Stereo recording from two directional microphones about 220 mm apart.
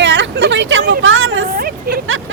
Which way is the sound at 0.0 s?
50° right (ahead or behind).